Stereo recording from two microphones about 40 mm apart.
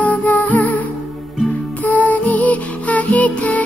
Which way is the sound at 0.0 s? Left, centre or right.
Left.